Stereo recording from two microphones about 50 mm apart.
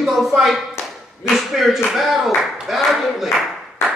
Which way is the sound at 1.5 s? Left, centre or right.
Centre.